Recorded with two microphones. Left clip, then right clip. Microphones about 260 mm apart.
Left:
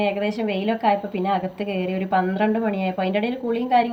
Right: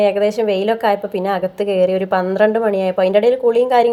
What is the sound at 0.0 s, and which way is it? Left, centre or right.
A woman's voice, centre.